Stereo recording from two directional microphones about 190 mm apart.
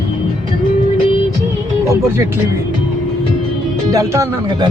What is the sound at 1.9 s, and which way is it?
Speech, 15° right (ahead or behind).